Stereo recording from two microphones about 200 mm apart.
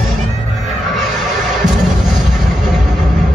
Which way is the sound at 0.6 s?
Centre (ahead or behind).